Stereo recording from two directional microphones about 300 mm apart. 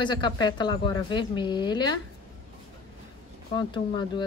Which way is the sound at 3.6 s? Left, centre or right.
Centre.